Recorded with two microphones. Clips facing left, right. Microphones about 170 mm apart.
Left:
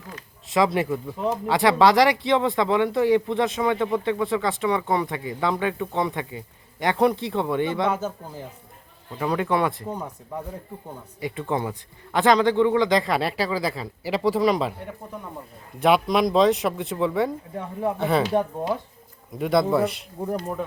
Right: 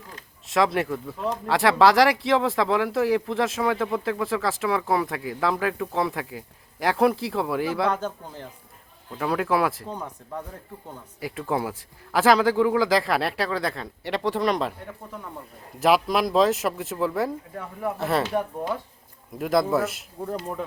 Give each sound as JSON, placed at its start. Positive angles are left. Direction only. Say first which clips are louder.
{"t": 0.4, "sound": "speech", "louder": "left 1 dB", "side_deg": 0}
{"t": 9.9, "sound": "speech", "louder": "left 2 dB", "side_deg": 10}
{"t": 11.2, "sound": "speech", "louder": "left 1 dB", "side_deg": 0}
{"t": 15.8, "sound": "speech", "louder": "left 1 dB", "side_deg": 0}
{"t": 17.5, "sound": "speech", "louder": "left 3 dB", "side_deg": 25}
{"t": 17.9, "sound": "speech", "louder": "left 2 dB", "side_deg": 0}
{"t": 18.2, "sound": "speech", "louder": "left 3 dB", "side_deg": 15}
{"t": 19.4, "sound": "speech", "louder": "left 2 dB", "side_deg": 0}